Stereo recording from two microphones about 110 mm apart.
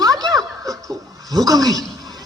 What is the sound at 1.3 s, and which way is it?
Speech, 35° right (ahead or behind).